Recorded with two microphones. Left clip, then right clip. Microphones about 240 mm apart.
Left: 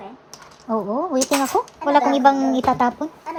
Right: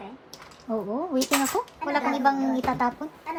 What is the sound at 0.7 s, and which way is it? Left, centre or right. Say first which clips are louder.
Speech: left 7 dB; left.